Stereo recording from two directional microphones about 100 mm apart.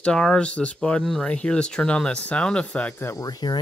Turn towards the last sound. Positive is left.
turn(degrees=40)  # may be behind; listen again after turning